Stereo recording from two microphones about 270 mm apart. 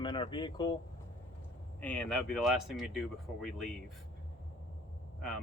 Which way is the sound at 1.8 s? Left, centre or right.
Centre.